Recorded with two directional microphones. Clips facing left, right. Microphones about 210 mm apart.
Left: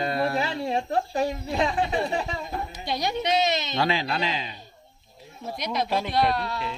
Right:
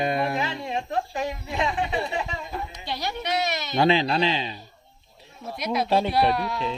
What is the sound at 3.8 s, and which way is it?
Speech, 25° right (ahead or behind).